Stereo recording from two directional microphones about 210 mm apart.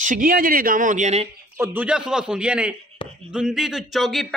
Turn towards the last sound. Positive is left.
turn(degrees=0)  # may be behind; listen again after turning